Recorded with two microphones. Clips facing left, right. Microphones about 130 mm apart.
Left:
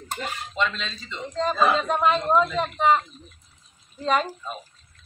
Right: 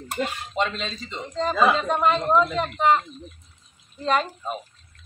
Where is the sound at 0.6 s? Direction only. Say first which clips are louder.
Right 2 dB; 35° right (ahead or behind).